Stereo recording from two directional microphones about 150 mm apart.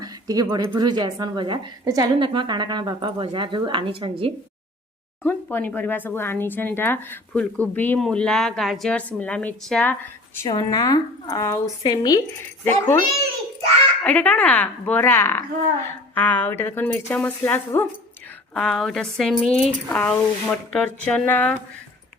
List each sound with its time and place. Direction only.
0.0 s speech: 25° right (ahead or behind)
5.2 s a woman's voice: 15° left (ahead or behind)
10.4 s a woman's voice: 25° left (ahead or behind)
12.6 s speech: 15° left (ahead or behind)
14.0 s speech: 10° left (ahead or behind)
18.5 s a woman's voice: 5° left (ahead or behind)